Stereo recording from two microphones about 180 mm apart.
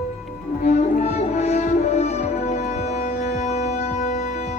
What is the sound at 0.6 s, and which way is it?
Music, 40° left (ahead or behind).